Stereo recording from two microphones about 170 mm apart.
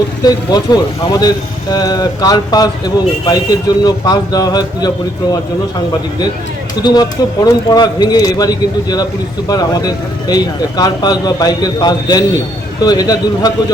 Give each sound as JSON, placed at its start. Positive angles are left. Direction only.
{"t": 0.3, "sound": "speech", "side_deg": 25}
{"t": 6.8, "sound": "speech", "side_deg": 25}